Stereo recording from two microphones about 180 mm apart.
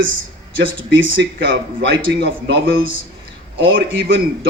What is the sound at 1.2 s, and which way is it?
Speech, 80° right.